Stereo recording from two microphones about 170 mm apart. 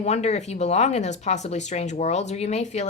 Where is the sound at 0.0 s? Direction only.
40° left (ahead or behind).